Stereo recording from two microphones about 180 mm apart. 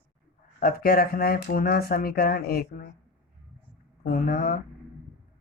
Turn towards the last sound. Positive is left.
turn(degrees=55)  # may be behind; listen again after turning